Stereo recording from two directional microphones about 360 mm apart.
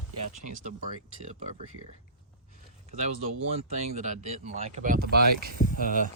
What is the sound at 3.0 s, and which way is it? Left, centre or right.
Speech, centre.